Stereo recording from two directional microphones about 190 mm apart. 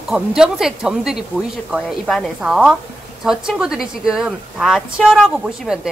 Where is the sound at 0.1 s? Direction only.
5° right (ahead or behind).